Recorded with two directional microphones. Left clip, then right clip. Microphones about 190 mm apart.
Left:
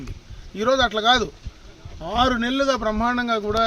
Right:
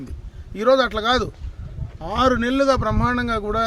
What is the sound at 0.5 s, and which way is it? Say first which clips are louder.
A man's voice: right 2 dB; 20° right (ahead or behind).